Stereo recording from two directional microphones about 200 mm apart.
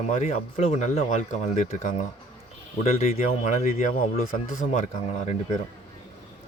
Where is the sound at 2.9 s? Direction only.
35° left (ahead or behind).